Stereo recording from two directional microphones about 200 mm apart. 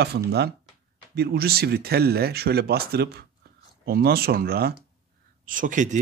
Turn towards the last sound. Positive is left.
turn(degrees=-40)  # may be behind; listen again after turning